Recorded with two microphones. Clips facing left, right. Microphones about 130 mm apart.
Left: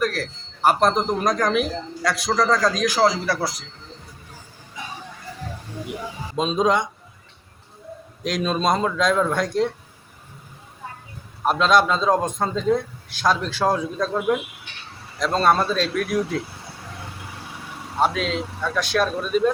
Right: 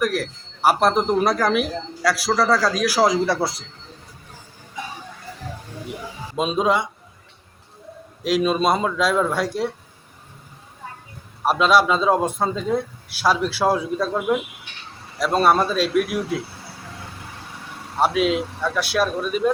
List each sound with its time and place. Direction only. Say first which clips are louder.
0.0 s speech: right 2 dB; 10° right (ahead or behind)
3.1 s speech: right 4 dB; 25° right (ahead or behind)
6.3 s speech: even; 5° right (ahead or behind)
8.2 s speech: right 3 dB; 5° right (ahead or behind)
11.4 s a man's voice: right 1 dB; 5° right (ahead or behind)
18.0 s a man's voice: right 3 dB; 10° right (ahead or behind)